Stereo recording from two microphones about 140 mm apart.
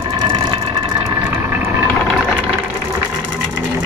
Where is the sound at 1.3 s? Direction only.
15° right (ahead or behind).